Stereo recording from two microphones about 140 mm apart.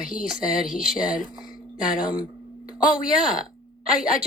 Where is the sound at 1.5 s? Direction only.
75° left (ahead or behind).